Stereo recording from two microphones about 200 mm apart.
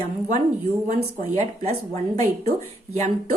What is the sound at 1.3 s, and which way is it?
Speech, 35° right (ahead or behind).